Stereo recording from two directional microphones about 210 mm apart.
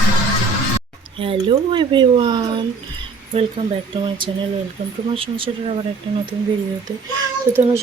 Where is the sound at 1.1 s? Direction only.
25° right (ahead or behind).